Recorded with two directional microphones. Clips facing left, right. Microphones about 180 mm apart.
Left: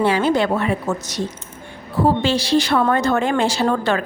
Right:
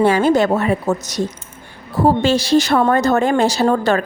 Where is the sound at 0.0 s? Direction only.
45° right (ahead or behind).